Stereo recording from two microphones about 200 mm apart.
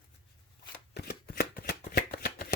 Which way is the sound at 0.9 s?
50° left (ahead or behind).